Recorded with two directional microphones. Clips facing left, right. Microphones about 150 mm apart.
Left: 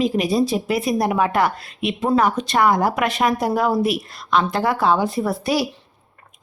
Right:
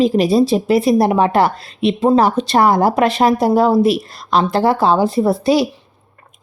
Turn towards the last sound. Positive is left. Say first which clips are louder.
# right 7 dB
turn(degrees=-25)  # may be behind; listen again after turning